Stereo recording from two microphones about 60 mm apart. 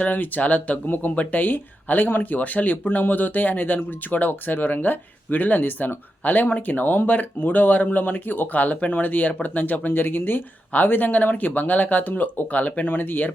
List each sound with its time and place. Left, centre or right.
0.0 s speech: left